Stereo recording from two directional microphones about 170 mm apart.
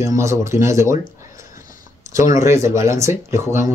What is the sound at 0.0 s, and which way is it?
Speech, 15° right (ahead or behind).